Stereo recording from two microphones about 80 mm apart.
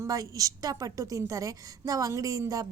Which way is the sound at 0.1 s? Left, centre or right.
Right.